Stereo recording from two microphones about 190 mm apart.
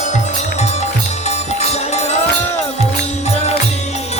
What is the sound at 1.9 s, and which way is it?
Music, 35° left (ahead or behind).